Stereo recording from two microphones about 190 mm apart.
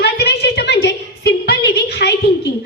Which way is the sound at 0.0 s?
60° left (ahead or behind).